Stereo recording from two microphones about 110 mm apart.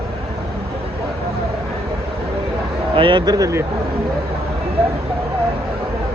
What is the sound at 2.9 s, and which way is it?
Speech, 50° right (ahead or behind).